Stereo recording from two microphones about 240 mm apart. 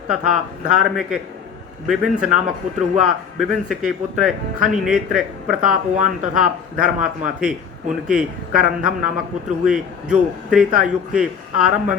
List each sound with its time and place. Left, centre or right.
0.1 s speech: centre
5.5 s speech: right
6.4 s speech: centre